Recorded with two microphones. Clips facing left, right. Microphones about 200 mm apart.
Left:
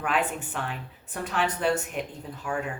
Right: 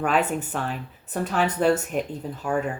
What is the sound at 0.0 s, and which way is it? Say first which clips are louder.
Speech: right 5 dB; 40° right (ahead or behind).